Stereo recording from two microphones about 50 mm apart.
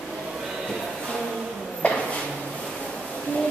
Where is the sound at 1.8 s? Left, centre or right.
Left.